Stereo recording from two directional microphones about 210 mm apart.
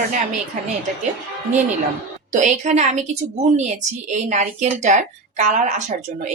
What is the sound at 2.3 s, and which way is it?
A woman's voice, 35° right (ahead or behind).